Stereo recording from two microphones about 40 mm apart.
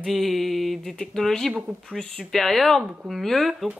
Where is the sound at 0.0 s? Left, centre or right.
Centre.